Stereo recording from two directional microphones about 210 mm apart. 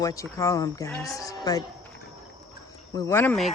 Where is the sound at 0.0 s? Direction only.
15° left (ahead or behind).